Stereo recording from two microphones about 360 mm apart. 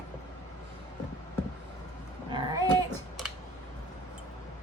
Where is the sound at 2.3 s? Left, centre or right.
Centre.